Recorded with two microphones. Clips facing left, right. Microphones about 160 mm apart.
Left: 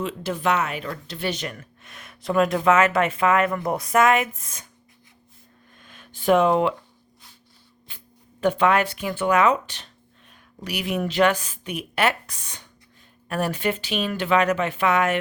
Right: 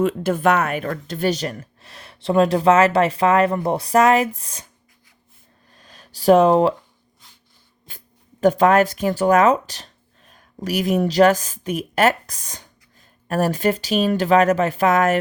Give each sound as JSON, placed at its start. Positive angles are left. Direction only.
{"t": 0.0, "sound": "speech", "side_deg": -50}
{"t": 5.7, "sound": "a sound", "side_deg": -35}
{"t": 7.9, "sound": "speech", "side_deg": -40}